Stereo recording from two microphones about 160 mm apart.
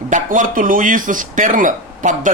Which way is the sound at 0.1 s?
55° right (ahead or behind).